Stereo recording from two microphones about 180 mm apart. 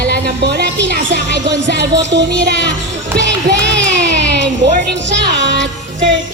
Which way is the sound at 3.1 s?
80° right.